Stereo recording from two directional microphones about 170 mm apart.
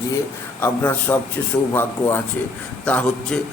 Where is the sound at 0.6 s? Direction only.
10° left (ahead or behind).